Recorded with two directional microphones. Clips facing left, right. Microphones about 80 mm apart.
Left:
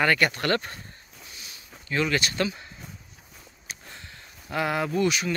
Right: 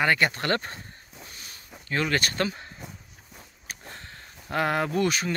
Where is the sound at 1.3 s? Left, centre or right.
Right.